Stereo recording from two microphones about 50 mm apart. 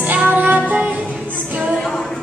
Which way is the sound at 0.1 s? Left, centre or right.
Right.